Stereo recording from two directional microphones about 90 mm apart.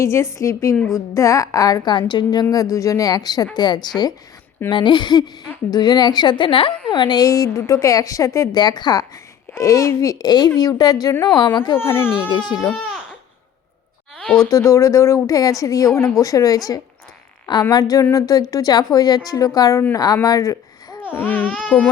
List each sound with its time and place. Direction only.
0.0 s a woman's voice: 30° left (ahead or behind); by 4.1 s 50° left (ahead or behind)
4.7 s a woman's voice: 60° left (ahead or behind); by 8.4 s 35° left (ahead or behind)
8.5 s a woman's voice: 50° left (ahead or behind)
9.6 s a woman's voice: 35° left (ahead or behind)
11.3 s speech: 60° left (ahead or behind)
11.8 s speech: 25° left (ahead or behind)
12.3 s a woman's voice: 55° left (ahead or behind)
14.2 s a sound: 10° left (ahead or behind)
14.5 s a woman's voice: 35° left (ahead or behind)
21.1 s speech: 20° left (ahead or behind)